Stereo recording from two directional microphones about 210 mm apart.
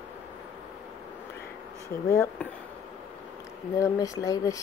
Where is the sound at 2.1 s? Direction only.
10° left (ahead or behind).